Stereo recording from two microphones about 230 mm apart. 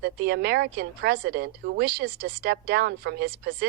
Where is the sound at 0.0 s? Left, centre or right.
Right.